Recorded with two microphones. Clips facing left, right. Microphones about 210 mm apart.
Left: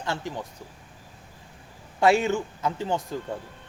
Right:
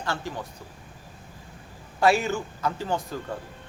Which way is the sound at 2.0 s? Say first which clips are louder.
Left 1 dB; 25° left (ahead or behind).